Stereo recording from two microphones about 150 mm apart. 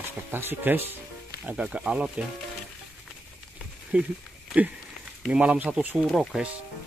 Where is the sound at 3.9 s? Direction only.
10° right (ahead or behind).